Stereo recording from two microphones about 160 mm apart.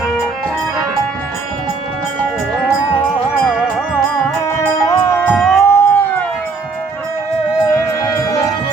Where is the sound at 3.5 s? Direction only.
5° right (ahead or behind).